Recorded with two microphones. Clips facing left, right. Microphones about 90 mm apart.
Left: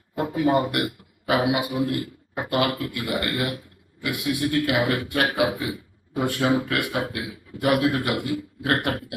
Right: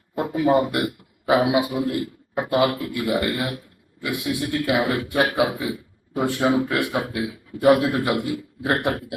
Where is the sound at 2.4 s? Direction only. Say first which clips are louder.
Right 3 dB; 20° right (ahead or behind).